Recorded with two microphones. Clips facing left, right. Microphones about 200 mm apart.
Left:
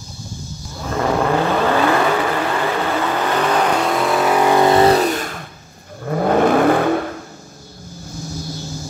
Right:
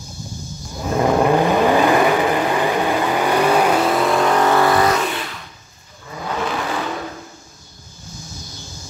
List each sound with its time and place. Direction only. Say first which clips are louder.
0.7 s vehicle: right 2 dB; 15° right (ahead or behind); by 7.0 s 55° left (ahead or behind)